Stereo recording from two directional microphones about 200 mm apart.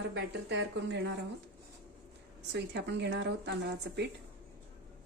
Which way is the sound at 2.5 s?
60° right (ahead or behind).